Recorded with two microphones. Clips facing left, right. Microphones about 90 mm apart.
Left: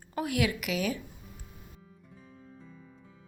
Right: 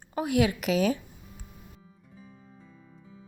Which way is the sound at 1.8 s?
Centre (ahead or behind).